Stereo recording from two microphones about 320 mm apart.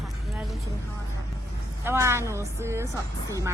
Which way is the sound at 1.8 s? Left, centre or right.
Centre.